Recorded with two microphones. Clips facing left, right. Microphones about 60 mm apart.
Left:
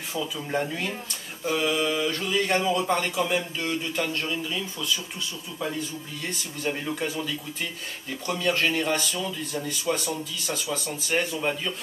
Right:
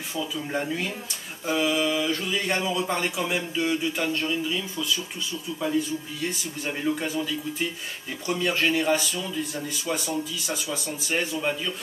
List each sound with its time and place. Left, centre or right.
0.1 s mantra: centre
3.2 s speech: centre
4.2 s mantra: centre
6.6 s mantra: centre
8.3 s speech: centre
11.1 s mantra: centre